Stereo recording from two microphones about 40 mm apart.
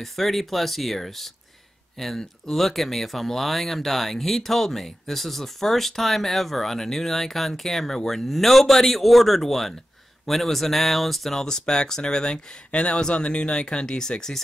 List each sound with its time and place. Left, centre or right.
0.0 s speech: centre
11.3 s speech: centre